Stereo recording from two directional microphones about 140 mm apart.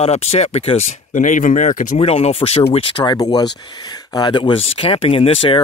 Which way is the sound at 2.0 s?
45° left (ahead or behind).